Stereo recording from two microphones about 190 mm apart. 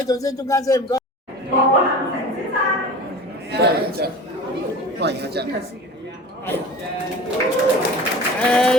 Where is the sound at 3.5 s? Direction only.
60° right (ahead or behind).